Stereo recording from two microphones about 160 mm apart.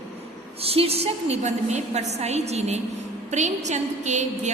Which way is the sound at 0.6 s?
40° right (ahead or behind).